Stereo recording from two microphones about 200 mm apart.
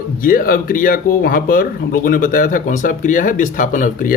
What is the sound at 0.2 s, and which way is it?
Speech, 45° left (ahead or behind).